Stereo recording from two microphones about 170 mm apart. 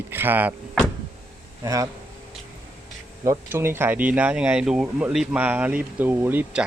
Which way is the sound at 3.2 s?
15° right (ahead or behind).